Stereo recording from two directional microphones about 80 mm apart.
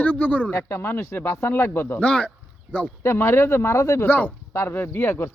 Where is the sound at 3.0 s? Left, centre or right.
Left.